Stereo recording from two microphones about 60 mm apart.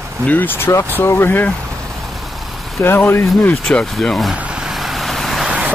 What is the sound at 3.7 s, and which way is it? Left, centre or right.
Speech, centre.